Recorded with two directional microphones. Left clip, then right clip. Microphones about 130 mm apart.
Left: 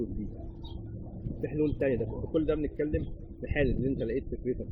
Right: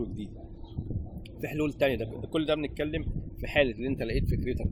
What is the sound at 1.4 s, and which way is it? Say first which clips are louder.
Speech: right 2 dB; 15° right (ahead or behind).